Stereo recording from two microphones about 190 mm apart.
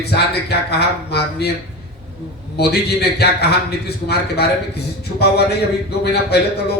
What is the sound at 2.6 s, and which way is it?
A man's voice, 60° left (ahead or behind).